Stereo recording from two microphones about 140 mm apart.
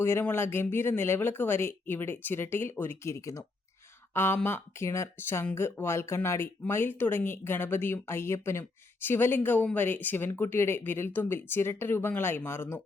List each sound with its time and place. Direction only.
0.0 s speech: 15° left (ahead or behind)